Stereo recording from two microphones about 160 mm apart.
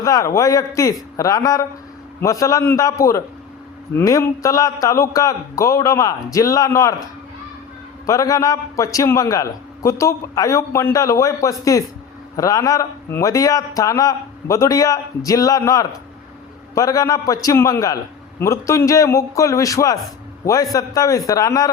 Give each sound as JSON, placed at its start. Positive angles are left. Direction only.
{"t": 0.0, "sound": "a man's voice", "side_deg": 20}
{"t": 8.0, "sound": "a man's voice", "side_deg": 20}